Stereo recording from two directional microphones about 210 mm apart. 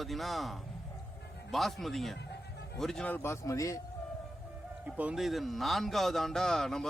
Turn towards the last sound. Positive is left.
turn(degrees=0)  # may be behind; listen again after turning